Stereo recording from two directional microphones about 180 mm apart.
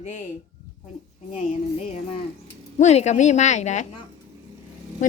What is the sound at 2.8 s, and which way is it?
Speech, 40° left (ahead or behind).